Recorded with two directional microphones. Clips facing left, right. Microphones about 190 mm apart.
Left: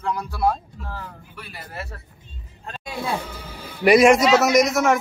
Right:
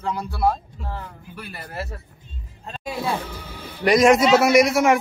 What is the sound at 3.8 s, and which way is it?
Speech, 5° left (ahead or behind).